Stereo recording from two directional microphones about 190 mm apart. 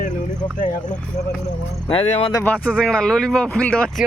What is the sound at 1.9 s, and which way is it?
Speech, 30° left (ahead or behind).